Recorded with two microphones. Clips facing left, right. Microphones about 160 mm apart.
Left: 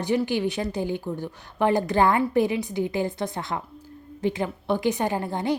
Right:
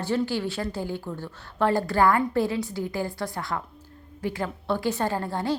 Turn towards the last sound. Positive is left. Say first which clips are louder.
# left 1 dB
turn(degrees=20)  # may be behind; listen again after turning